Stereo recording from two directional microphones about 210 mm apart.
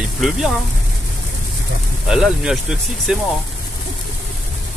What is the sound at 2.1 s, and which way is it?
Speech, 5° right (ahead or behind).